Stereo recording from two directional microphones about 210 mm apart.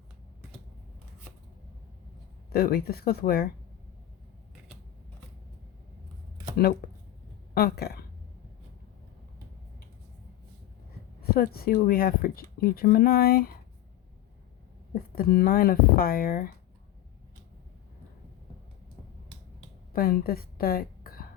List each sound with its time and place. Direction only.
2.5 s speech: 50° left (ahead or behind)
6.8 s speech: 45° left (ahead or behind)
11.3 s speech: 45° left (ahead or behind)
15.1 s speech: 45° left (ahead or behind)
19.9 s a woman's voice: 45° left (ahead or behind)